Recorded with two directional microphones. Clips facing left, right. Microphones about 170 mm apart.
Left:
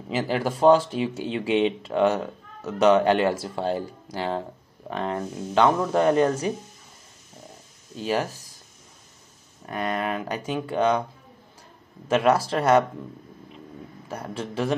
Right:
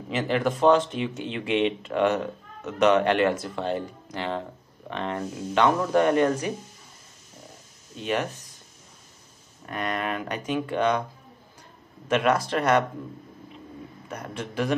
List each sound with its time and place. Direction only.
0.1 s speech: 30° left (ahead or behind)
8.0 s speech: 35° left (ahead or behind)
9.7 s speech: 30° left (ahead or behind)
12.1 s speech: 30° left (ahead or behind)
14.0 s a man's voice: 30° left (ahead or behind)